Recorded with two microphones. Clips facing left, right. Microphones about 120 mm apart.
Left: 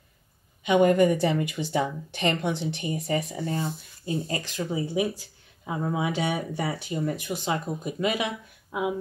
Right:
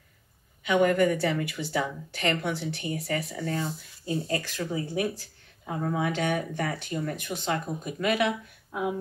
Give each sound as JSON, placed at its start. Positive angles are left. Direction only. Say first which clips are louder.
{"t": 0.7, "sound": "a woman's voice", "louder": "left 3 dB", "side_deg": 20}
{"t": 8.0, "sound": "speech", "louder": "right 2 dB", "side_deg": -55}